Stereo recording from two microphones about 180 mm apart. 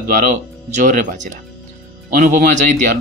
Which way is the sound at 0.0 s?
50° right (ahead or behind).